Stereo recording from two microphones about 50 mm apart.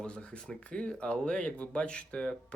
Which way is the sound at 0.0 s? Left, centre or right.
Left.